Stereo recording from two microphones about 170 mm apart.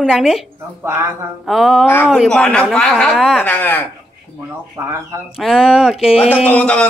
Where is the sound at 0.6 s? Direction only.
15° right (ahead or behind).